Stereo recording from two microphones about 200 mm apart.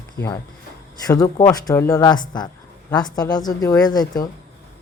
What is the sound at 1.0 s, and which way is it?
Speech, 20° left (ahead or behind).